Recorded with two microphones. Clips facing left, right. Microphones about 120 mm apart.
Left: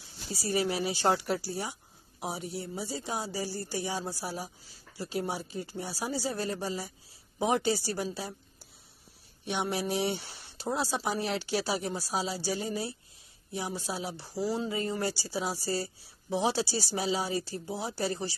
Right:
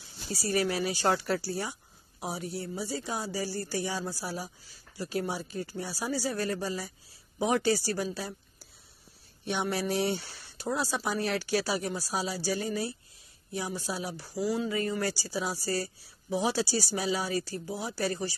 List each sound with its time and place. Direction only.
0.3 s speech: 20° left (ahead or behind)
9.4 s speech: 20° left (ahead or behind)